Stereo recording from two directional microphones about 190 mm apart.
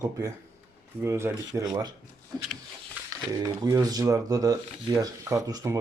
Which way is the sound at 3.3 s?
20° right (ahead or behind).